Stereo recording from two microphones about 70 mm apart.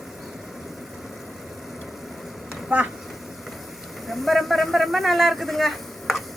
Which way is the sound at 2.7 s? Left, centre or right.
Centre.